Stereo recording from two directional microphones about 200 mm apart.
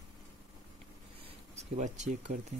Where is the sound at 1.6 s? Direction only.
35° right (ahead or behind).